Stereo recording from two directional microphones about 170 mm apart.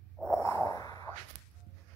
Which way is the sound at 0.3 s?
15° left (ahead or behind).